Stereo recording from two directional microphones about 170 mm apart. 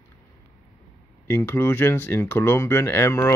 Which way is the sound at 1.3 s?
15° left (ahead or behind).